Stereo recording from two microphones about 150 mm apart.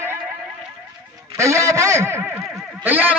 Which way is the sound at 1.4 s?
20° right (ahead or behind).